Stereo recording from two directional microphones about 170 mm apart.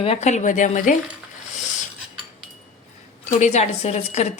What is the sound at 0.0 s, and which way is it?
Speech, 40° left (ahead or behind).